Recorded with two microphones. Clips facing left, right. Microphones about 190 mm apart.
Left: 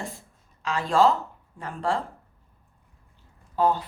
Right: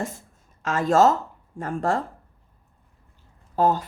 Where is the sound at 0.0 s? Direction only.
45° right (ahead or behind).